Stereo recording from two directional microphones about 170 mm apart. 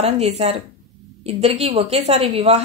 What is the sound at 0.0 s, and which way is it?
A woman's voice, 40° right (ahead or behind).